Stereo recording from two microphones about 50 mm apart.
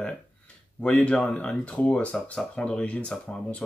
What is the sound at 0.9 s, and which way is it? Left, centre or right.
Speech, left.